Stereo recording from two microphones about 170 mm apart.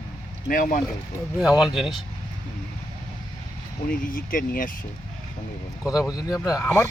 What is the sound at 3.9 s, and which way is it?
Speech, 55° left (ahead or behind).